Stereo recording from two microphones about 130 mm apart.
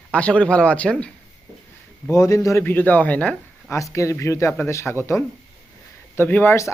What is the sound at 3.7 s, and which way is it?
Speech, 25° left (ahead or behind).